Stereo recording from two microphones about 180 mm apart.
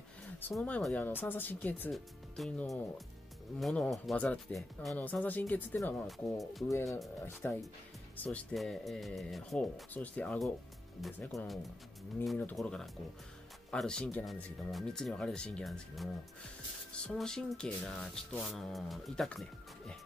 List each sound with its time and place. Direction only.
0.4 s speech: 5° left (ahead or behind)
6.3 s speech: centre (ahead or behind)
6.7 s speech: 15° left (ahead or behind)